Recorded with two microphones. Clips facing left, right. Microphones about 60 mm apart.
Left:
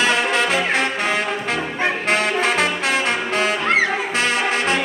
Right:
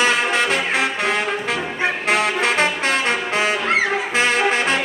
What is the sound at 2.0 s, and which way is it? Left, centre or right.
Brass instrument, centre.